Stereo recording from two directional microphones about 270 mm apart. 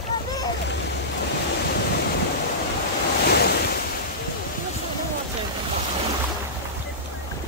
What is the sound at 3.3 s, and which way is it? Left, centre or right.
Waves, left.